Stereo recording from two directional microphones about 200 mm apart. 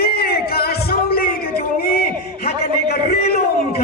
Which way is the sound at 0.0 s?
50° left (ahead or behind).